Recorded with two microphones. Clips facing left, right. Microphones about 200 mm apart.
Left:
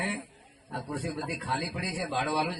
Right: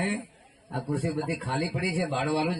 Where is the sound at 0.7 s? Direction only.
40° right (ahead or behind).